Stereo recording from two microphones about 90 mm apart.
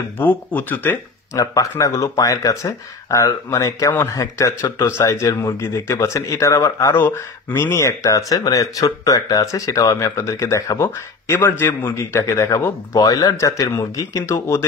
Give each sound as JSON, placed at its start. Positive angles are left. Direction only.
{"t": 0.2, "sound": "speech", "side_deg": 20}
{"t": 1.3, "sound": "speech", "side_deg": 40}